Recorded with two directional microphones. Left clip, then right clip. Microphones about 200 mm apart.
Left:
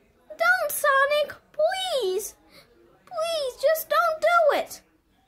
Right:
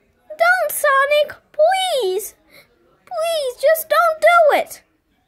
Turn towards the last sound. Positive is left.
turn(degrees=-25)  # may be behind; listen again after turning